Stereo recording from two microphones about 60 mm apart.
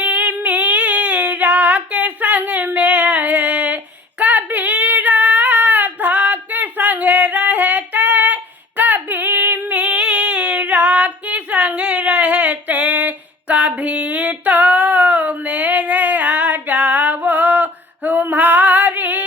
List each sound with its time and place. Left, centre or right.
0.0 s female singing: right
2.4 s a sound: right
4.2 s female singing: right